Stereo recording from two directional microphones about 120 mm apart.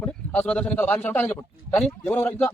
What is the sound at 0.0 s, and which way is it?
A man's voice, 10° left (ahead or behind).